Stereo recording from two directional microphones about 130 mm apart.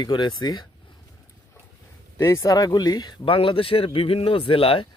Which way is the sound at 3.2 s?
45° left (ahead or behind).